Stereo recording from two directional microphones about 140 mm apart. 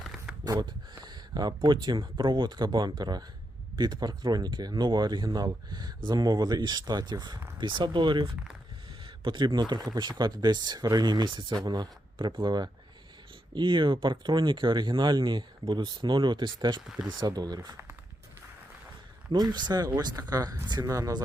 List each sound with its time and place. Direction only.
0.0 s a sound: centre (ahead or behind)
0.6 s speech: 30° right (ahead or behind)
19.3 s speech: 30° right (ahead or behind)